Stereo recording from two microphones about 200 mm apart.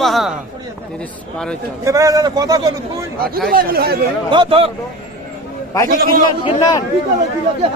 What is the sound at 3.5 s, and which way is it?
Speech, 50° right (ahead or behind).